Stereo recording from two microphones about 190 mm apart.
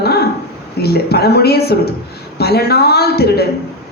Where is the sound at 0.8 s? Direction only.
55° left (ahead or behind).